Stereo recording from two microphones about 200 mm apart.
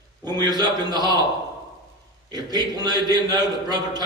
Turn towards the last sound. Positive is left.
turn(degrees=-20)  # may be behind; listen again after turning